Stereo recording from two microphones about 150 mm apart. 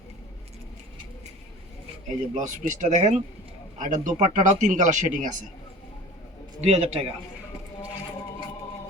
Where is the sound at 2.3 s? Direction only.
55° right (ahead or behind).